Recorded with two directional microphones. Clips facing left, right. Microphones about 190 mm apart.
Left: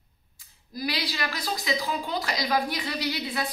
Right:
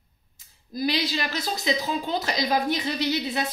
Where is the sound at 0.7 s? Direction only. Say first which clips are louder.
Right 5 dB; 20° right (ahead or behind).